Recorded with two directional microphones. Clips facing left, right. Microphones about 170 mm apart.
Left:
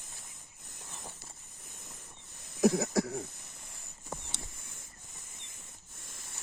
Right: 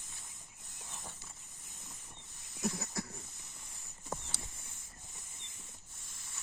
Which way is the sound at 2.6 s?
80° left.